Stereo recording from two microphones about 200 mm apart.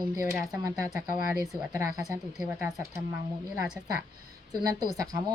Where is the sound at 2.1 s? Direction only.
10° right (ahead or behind).